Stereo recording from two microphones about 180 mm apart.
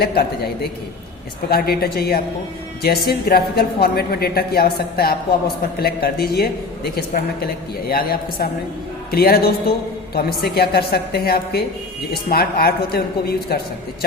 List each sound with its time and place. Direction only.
0.0 s a woman's voice: 60° left (ahead or behind)